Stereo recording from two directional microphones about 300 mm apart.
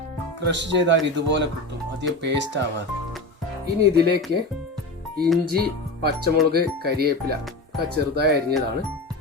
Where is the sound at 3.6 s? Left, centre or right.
Right.